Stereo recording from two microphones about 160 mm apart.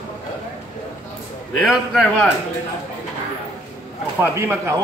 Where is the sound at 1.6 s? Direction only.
Centre (ahead or behind).